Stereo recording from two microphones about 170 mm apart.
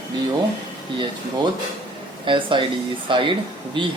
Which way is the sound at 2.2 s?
30° right (ahead or behind).